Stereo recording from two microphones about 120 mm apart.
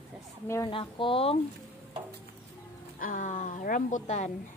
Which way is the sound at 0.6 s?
45° left (ahead or behind).